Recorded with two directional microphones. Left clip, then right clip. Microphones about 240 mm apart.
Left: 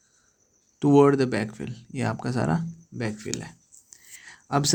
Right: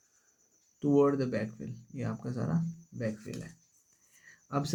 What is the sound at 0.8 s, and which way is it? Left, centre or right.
Speech, left.